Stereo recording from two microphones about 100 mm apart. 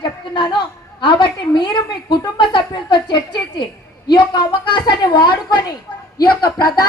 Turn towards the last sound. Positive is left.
turn(degrees=45)  # may be behind; listen again after turning